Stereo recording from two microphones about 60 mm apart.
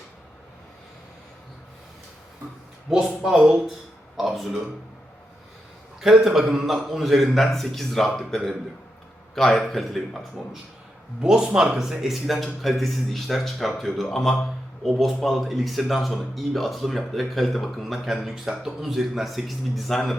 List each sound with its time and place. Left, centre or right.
3.2 s speech: centre
6.0 s speech: centre
11.2 s speech: centre